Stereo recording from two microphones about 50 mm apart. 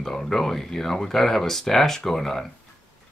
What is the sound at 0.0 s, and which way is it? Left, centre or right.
Speech, centre.